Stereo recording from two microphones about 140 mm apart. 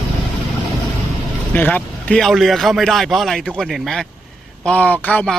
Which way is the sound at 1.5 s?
10° left (ahead or behind).